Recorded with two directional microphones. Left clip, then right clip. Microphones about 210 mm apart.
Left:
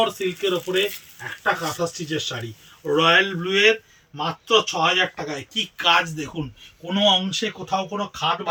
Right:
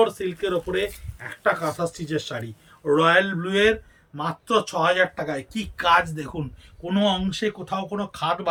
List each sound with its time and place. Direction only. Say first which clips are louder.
0.0 s speech: even; 10° right (ahead or behind)
1.8 s speech: left 2 dB; 15° right (ahead or behind)